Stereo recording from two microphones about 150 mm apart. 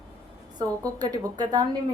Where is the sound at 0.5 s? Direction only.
25° right (ahead or behind).